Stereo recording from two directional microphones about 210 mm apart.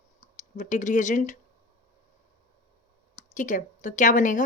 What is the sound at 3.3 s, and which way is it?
A woman's voice, 35° left (ahead or behind).